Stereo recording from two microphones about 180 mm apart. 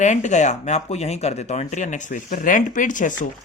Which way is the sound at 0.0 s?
40° left (ahead or behind).